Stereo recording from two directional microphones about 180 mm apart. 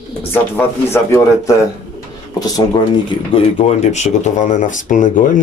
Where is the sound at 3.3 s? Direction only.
35° left (ahead or behind).